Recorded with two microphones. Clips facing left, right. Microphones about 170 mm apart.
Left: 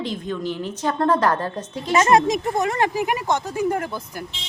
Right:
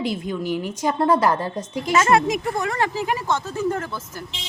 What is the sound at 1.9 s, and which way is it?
Speech, 25° left (ahead or behind).